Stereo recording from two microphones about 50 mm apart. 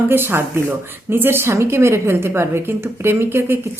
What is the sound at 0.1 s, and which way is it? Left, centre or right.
A woman's voice, right.